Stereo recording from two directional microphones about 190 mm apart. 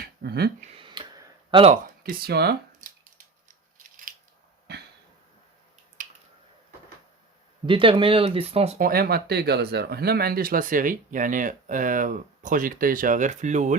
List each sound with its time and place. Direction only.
0.2 s speech: 55° right (ahead or behind)
0.8 s a sound: 25° right (ahead or behind)
1.7 s speech: 50° right (ahead or behind)
4.1 s scissors: 45° right (ahead or behind)
6.0 s a sound: 45° right (ahead or behind)
7.7 s speech: 25° right (ahead or behind)
8.8 s speech: 50° right (ahead or behind)